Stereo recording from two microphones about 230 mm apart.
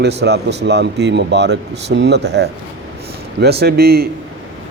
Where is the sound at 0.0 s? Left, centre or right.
Right.